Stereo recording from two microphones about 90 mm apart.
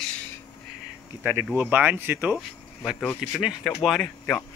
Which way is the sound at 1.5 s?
20° right (ahead or behind).